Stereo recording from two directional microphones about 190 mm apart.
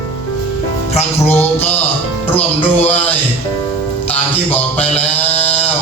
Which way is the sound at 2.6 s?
35° left (ahead or behind).